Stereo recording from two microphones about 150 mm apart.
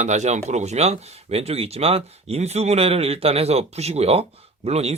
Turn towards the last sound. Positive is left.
turn(degrees=-45)  # may be behind; listen again after turning